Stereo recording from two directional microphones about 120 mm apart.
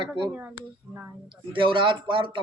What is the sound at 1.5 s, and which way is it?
Speech, 45° right (ahead or behind).